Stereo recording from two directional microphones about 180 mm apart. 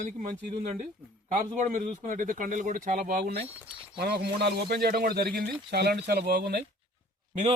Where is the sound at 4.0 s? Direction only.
65° right (ahead or behind).